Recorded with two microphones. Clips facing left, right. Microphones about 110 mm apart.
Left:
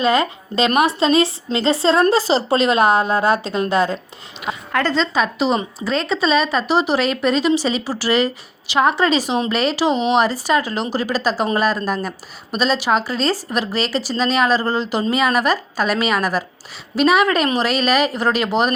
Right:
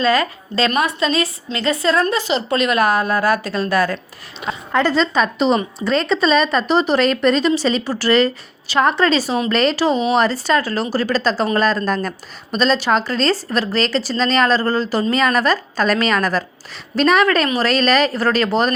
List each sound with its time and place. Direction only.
0.0 s a woman's voice: 20° left (ahead or behind)
4.8 s a woman's voice: 10° right (ahead or behind)
5.1 s a woman's voice: 5° left (ahead or behind)